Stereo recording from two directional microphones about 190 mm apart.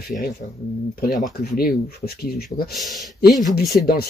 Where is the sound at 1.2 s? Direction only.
45° left (ahead or behind).